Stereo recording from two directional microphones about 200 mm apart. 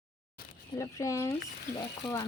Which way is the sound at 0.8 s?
15° left (ahead or behind).